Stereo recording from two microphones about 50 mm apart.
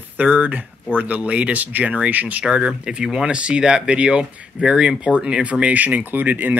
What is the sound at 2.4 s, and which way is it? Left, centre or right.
Speech, centre.